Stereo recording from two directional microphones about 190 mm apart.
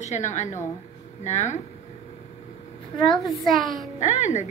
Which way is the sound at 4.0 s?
40° left (ahead or behind).